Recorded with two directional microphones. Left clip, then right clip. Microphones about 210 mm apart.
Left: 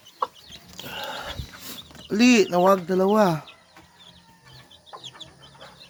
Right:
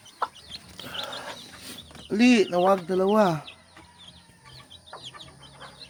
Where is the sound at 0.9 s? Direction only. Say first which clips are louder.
Left 2 dB; 20° left (ahead or behind).